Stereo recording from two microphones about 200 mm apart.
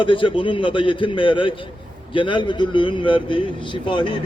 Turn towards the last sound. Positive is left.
turn(degrees=25)  # may be behind; listen again after turning